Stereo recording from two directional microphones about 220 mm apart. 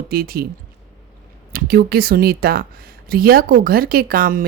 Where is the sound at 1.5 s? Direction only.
45° right (ahead or behind).